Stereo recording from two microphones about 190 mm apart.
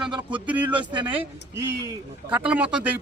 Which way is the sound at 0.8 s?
25° right (ahead or behind).